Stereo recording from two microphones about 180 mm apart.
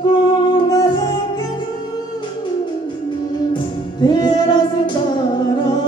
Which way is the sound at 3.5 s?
25° left (ahead or behind).